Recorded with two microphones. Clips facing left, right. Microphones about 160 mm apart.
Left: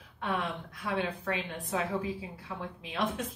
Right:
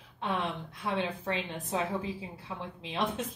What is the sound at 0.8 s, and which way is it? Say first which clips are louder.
A woman's voice: even; 25° right (ahead or behind).